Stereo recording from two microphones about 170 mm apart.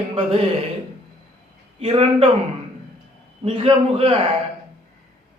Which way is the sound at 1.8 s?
35° right (ahead or behind).